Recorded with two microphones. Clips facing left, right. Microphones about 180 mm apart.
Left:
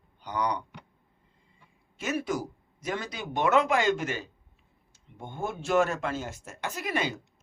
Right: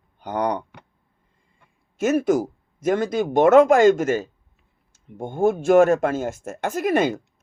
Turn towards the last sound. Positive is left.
turn(degrees=-50)  # may be behind; listen again after turning